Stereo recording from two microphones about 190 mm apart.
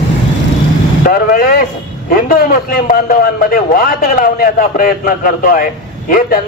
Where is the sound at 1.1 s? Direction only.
50° left (ahead or behind).